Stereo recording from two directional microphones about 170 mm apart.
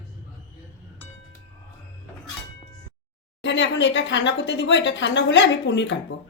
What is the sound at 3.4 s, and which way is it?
Speech, 90° left.